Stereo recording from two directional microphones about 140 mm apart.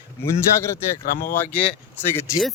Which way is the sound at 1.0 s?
90° left.